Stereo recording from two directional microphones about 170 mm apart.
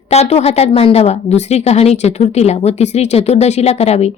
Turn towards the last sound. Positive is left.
turn(degrees=40)  # may be behind; listen again after turning